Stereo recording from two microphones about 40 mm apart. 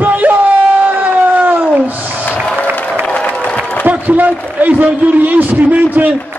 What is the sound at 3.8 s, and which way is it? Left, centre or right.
A man's voice, right.